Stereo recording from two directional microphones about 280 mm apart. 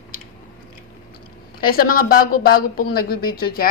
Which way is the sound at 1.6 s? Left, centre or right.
Left.